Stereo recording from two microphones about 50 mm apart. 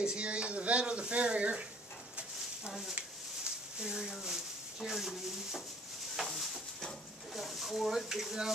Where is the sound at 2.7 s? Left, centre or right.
Centre.